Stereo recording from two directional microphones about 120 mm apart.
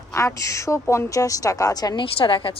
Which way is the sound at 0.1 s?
25° left (ahead or behind).